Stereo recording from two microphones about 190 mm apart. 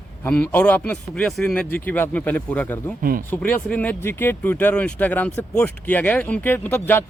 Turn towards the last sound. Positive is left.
turn(degrees=10)  # may be behind; listen again after turning